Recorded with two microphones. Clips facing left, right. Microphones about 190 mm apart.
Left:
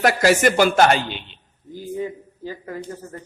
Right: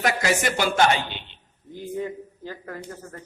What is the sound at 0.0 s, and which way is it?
Speech, 60° left (ahead or behind).